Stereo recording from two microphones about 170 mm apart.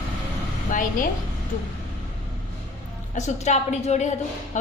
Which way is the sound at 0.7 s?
50° left (ahead or behind).